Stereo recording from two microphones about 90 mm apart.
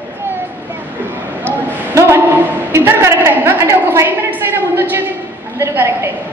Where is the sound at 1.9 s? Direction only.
35° right (ahead or behind).